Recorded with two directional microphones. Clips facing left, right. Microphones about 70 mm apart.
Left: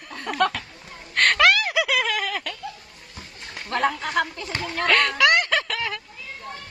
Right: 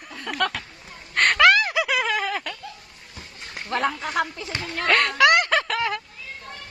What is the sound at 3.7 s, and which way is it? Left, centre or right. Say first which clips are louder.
Speech: left 1 dB; centre.